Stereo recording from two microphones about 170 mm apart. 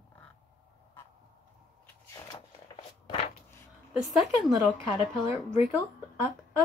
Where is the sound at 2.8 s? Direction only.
35° left (ahead or behind).